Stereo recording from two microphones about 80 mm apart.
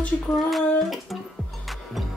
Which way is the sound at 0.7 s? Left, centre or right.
Centre.